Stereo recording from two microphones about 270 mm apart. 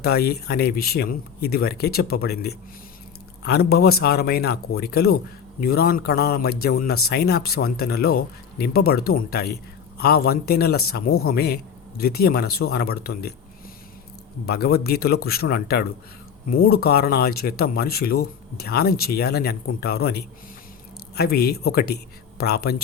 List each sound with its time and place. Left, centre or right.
0.0 s a man's voice: left
14.4 s a man's voice: left